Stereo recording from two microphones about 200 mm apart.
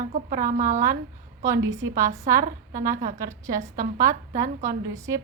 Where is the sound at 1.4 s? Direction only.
15° right (ahead or behind).